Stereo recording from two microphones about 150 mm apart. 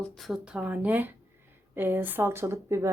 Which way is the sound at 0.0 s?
Centre (ahead or behind).